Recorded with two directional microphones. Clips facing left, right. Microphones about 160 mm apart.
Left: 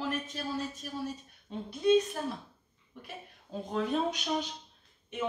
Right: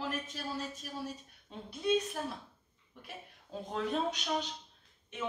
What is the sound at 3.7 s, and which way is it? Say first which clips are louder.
Speech: left 3 dB; centre (ahead or behind).